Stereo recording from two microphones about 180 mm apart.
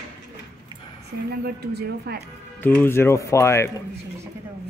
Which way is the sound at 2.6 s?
10° left (ahead or behind).